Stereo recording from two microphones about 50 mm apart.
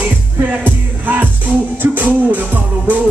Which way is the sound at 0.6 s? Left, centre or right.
Right.